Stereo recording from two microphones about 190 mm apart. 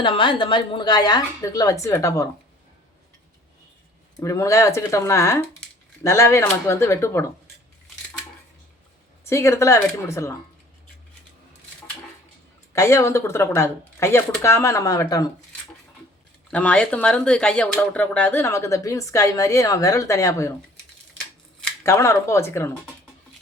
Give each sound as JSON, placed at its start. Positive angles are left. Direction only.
{"t": 0.0, "sound": "a woman's voice", "side_deg": 25}
{"t": 4.2, "sound": "speech", "side_deg": 15}
{"t": 9.2, "sound": "speech", "side_deg": 15}
{"t": 12.7, "sound": "speech", "side_deg": 15}
{"t": 16.5, "sound": "speech", "side_deg": 5}
{"t": 21.6, "sound": "speech", "side_deg": 15}